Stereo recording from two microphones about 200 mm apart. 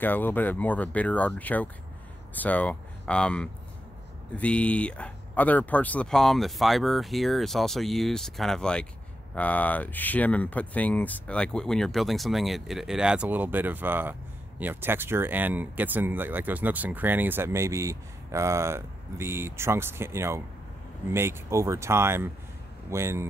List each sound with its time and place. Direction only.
0.0 s speech: 10° left (ahead or behind); by 23.2 s 15° right (ahead or behind)